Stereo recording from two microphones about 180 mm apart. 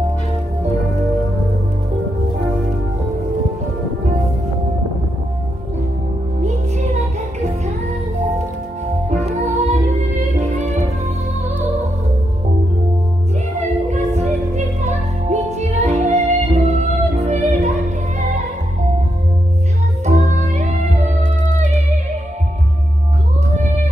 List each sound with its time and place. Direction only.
6.4 s music: 40° right (ahead or behind)
9.2 s music: 40° right (ahead or behind)
13.6 s music: 40° right (ahead or behind)
20.1 s music: 40° right (ahead or behind)